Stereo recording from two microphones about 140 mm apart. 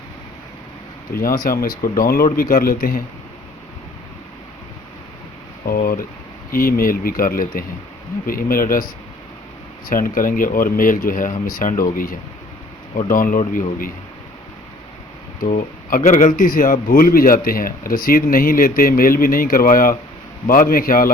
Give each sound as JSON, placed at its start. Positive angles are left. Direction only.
{"t": 1.1, "sound": "speech", "side_deg": 90}
{"t": 5.6, "sound": "speech", "side_deg": 85}
{"t": 13.1, "sound": "speech", "side_deg": 75}
{"t": 15.4, "sound": "speech", "side_deg": 70}